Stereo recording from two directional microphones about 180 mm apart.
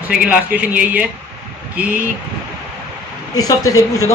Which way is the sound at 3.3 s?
20° left (ahead or behind).